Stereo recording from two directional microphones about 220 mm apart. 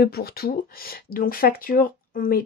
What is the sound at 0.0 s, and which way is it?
Speech, 45° left (ahead or behind).